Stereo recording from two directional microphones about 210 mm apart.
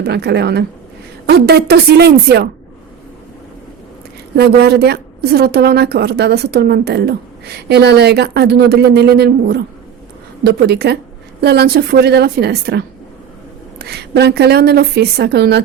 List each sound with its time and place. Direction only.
0.0 s a woman's voice: 50° right (ahead or behind)
4.4 s a woman's voice: 50° right (ahead or behind)